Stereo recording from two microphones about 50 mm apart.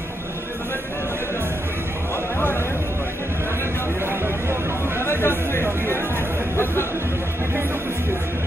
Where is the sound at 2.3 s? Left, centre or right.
Left.